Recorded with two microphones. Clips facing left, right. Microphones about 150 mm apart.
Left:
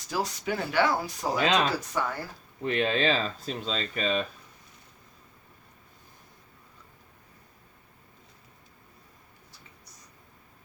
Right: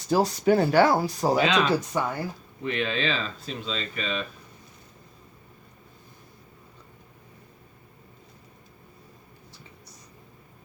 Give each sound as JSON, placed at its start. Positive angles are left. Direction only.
{"t": 0.1, "sound": "speech", "side_deg": -30}
{"t": 1.6, "sound": "speech", "side_deg": -25}
{"t": 2.6, "sound": "speech", "side_deg": 40}